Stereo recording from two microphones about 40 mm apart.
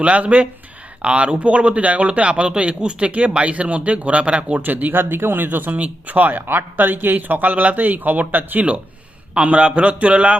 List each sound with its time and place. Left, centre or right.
0.0 s a man's voice: right
3.1 s a man's voice: right
4.6 s speech: right
5.7 s speech: right
9.4 s a man's voice: right